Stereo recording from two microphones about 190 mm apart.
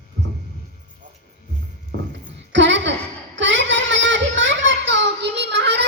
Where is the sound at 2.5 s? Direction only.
70° right (ahead or behind).